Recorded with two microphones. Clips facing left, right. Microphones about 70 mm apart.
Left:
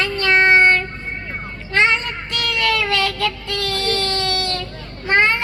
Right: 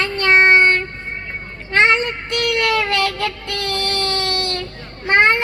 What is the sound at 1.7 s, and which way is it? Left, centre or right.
A child's voice, right.